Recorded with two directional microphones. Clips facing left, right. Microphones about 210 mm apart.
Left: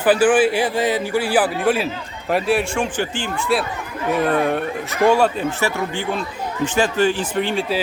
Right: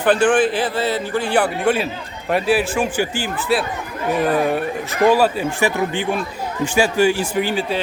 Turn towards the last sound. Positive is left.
turn(degrees=-5)  # may be behind; listen again after turning